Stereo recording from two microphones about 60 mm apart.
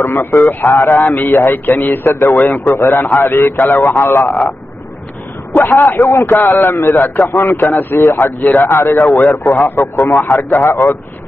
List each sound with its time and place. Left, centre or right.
0.0 s a man's voice: left
0.4 s a man's voice: left
5.6 s a man's voice: left